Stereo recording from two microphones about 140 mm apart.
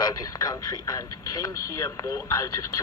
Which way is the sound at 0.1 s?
25° left (ahead or behind).